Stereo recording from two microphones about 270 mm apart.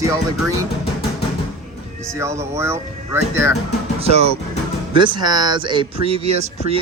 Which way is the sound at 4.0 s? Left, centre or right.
Right.